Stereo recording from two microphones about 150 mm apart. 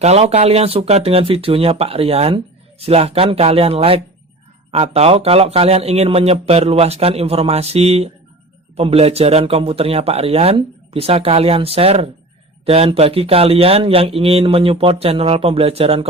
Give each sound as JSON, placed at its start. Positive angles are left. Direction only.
{"t": 0.0, "sound": "speech", "side_deg": -45}